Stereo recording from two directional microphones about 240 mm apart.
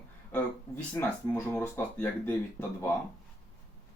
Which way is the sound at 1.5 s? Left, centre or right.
Centre.